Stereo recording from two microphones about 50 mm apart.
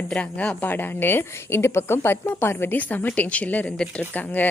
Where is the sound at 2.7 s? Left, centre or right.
Left.